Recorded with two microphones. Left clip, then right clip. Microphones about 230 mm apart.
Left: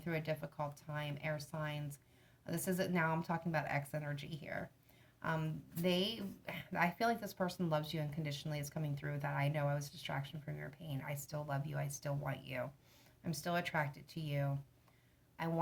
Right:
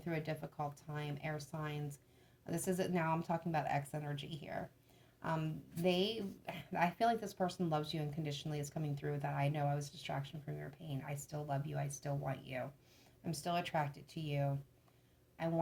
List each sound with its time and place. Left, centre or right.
0.0 s speech: left